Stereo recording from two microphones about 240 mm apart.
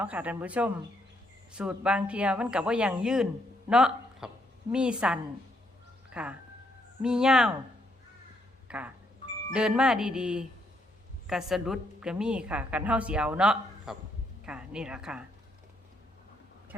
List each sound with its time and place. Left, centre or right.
0.0 s a woman's voice: centre
8.6 s a sound: centre
9.5 s a woman's voice: centre